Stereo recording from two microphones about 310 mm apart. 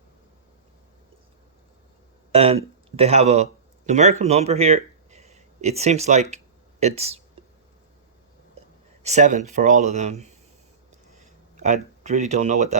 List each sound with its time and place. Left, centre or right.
2.3 s speech: centre
9.0 s speech: right
11.5 s speech: right